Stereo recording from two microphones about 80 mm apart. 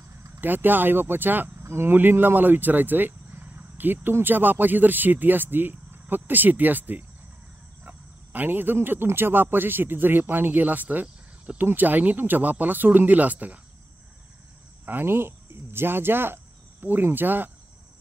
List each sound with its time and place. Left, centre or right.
0.4 s speech: right
14.9 s speech: right